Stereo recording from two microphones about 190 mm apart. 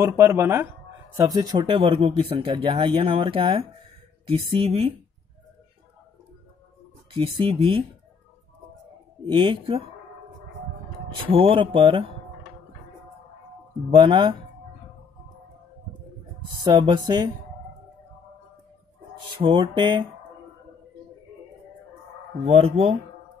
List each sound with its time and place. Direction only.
0.2 s a woman's voice: 10° right (ahead or behind); by 4.9 s 30° right (ahead or behind)
7.2 s speech: 30° right (ahead or behind)
9.2 s speech: 25° right (ahead or behind)
11.2 s speech: 30° right (ahead or behind)
13.8 s speech: 25° right (ahead or behind)
16.6 s speech: 25° right (ahead or behind)
19.4 s speech: 25° right (ahead or behind)
22.5 s a woman's voice: 30° right (ahead or behind)